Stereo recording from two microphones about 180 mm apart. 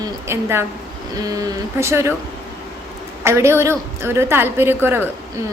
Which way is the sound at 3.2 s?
15° right (ahead or behind).